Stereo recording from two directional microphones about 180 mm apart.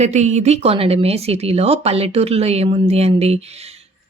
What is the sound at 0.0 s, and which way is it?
Speech, 40° right (ahead or behind).